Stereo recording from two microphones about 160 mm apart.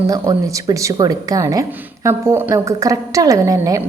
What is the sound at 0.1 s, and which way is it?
A woman's voice, 20° right (ahead or behind).